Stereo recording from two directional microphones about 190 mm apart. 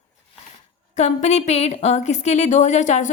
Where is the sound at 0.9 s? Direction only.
40° left (ahead or behind).